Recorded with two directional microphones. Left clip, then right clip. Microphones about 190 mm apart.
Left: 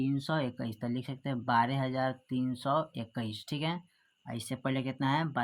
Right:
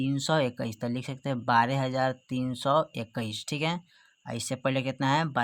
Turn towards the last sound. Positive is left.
turn(degrees=-35)  # may be behind; listen again after turning